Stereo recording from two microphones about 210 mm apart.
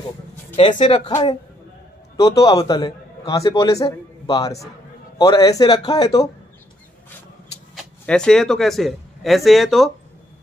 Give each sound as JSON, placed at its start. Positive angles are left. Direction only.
{"t": 0.6, "sound": "a man's voice", "side_deg": 25}
{"t": 7.7, "sound": "speech", "side_deg": 5}